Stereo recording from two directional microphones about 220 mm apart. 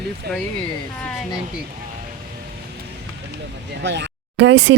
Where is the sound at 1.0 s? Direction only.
5° left (ahead or behind).